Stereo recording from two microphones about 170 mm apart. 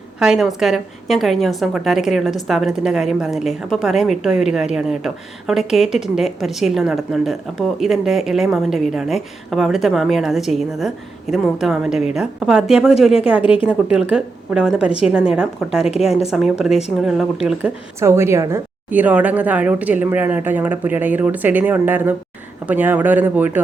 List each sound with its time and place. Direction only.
0.2 s a woman's voice: 5° right (ahead or behind)
13.4 s speech: 30° left (ahead or behind)
13.7 s a woman's voice: 5° right (ahead or behind)
18.0 s speech: 15° right (ahead or behind)